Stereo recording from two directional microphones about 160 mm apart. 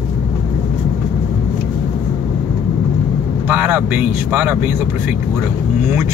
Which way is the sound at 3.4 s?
10° right (ahead or behind).